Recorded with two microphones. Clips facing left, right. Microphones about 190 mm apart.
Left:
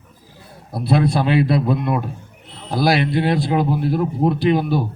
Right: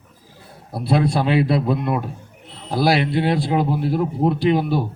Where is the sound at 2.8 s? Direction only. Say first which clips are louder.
Left 1 dB; 30° right (ahead or behind).